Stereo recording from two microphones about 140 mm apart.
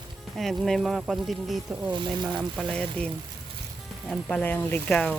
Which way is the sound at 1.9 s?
35° right (ahead or behind).